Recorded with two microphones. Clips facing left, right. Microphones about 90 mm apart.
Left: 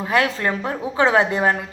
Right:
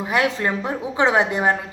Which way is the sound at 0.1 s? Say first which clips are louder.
Left 1 dB; 20° right (ahead or behind).